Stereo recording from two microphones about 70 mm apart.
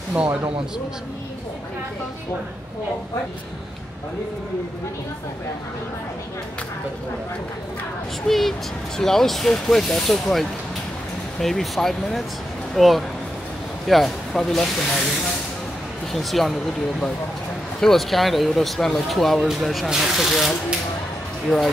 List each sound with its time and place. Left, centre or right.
0.1 s speech: centre
8.3 s speech: centre
11.3 s speech: centre
16.1 s speech: centre
17.7 s speech: centre